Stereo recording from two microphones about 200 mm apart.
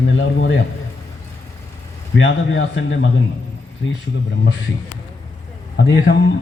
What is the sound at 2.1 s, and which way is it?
Speech, 70° left (ahead or behind).